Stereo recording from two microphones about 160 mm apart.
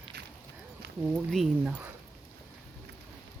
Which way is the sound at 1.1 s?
Centre (ahead or behind).